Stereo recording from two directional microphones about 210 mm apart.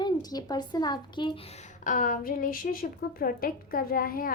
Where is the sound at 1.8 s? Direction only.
40° left (ahead or behind).